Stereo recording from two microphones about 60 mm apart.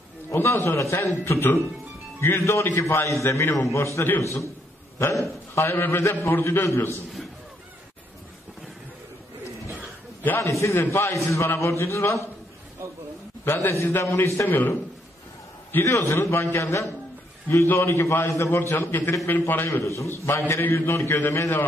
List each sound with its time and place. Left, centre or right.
0.3 s a man's voice: left
1.0 s a man's voice: left
10.4 s a man's voice: left
10.7 s a man's voice: left
13.5 s a man's voice: left
14.5 s a man's voice: left
15.7 s a man's voice: left
17.5 s a man's voice: left
19.7 s a man's voice: left